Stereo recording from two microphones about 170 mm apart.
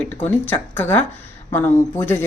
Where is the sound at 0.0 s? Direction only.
10° left (ahead or behind).